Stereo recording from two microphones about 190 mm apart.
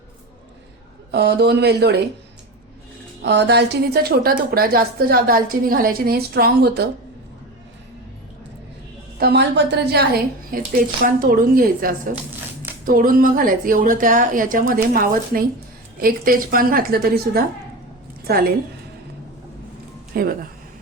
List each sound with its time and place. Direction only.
1.1 s a woman's voice: 60° right (ahead or behind)
3.2 s a woman's voice: 60° right (ahead or behind)
9.1 s speech: 60° right (ahead or behind)
12.1 s shuffling cards: 10° right (ahead or behind)
12.8 s speech: 45° right (ahead or behind)
20.1 s speech: 50° right (ahead or behind)